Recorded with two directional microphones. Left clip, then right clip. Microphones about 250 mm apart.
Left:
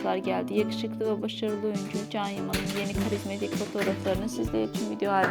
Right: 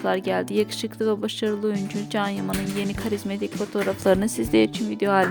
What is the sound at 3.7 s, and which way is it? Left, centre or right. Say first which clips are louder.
Speech: right 9 dB; right.